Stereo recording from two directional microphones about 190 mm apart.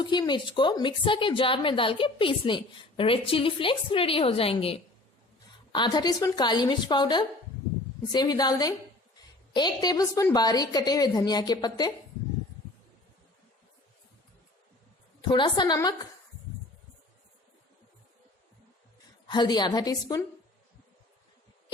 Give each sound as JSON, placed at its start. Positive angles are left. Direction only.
{"t": 0.0, "sound": "a woman's voice", "side_deg": 25}
{"t": 15.3, "sound": "a woman's voice", "side_deg": 25}
{"t": 19.3, "sound": "a woman's voice", "side_deg": 20}